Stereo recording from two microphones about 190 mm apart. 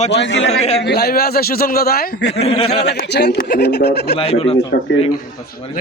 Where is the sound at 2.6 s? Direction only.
60° left (ahead or behind).